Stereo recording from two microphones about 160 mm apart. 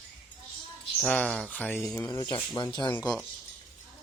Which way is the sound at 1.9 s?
25° left (ahead or behind).